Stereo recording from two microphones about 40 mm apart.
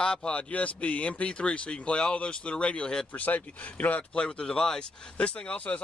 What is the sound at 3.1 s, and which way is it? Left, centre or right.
Speech, left.